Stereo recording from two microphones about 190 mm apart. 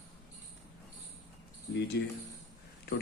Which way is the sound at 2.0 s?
65° left (ahead or behind).